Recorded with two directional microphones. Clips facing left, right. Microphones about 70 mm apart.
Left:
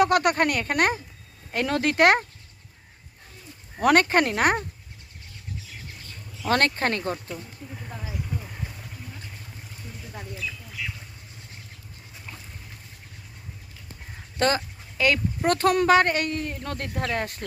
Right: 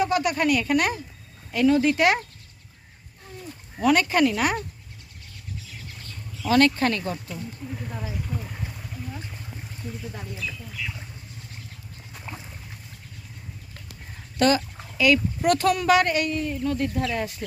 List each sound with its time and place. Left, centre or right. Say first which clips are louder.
0.0 s speech: left 2 dB; left
1.5 s speech: right 3 dB; left
3.8 s speech: left 1 dB; left
6.5 s speech: right 3 dB; left
7.3 s speech: right 3 dB; centre
8.4 s vehicle: right 2 dB; centre
14.3 s a sound: right 3 dB; left
15.4 s speech: even; left